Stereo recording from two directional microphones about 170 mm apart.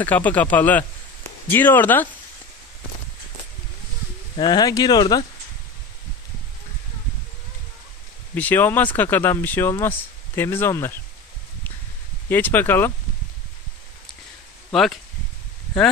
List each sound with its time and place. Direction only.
0.0 s speech: 10° left (ahead or behind)
4.4 s speech: 25° left (ahead or behind)
8.4 s speech: 10° left (ahead or behind)
12.3 s speech: 10° left (ahead or behind)
14.7 s speech: centre (ahead or behind)